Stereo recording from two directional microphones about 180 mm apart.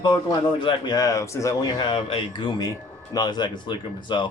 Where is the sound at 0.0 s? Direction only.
25° left (ahead or behind).